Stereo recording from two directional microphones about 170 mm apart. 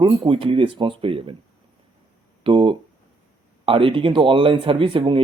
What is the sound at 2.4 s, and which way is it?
Speech, 30° right (ahead or behind).